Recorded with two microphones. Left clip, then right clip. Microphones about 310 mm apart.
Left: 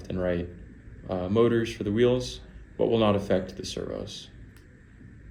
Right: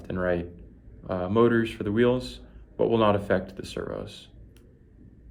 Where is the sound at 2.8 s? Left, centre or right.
Centre.